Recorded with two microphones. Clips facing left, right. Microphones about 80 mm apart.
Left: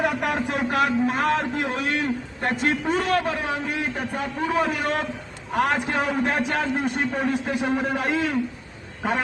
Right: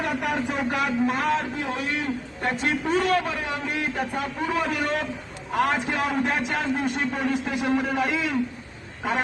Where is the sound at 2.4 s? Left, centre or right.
Left.